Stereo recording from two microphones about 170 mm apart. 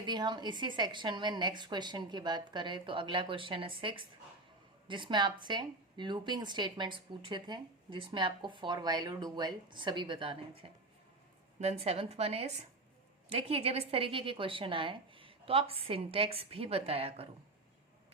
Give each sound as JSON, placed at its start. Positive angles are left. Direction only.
{"t": 0.0, "sound": "a woman's voice", "side_deg": -25}